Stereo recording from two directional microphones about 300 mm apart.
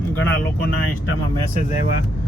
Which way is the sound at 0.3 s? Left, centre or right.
Left.